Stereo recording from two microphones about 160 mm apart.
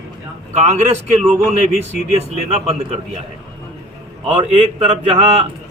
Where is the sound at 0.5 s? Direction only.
45° right (ahead or behind).